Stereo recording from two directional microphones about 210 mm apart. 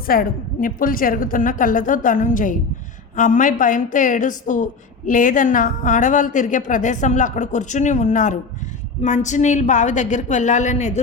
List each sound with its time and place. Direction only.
0.0 s a woman's voice: 45° left (ahead or behind)